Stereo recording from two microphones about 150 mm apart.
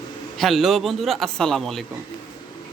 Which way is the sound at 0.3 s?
Centre (ahead or behind).